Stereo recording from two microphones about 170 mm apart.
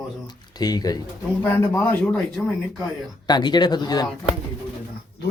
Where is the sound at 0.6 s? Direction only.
25° left (ahead or behind).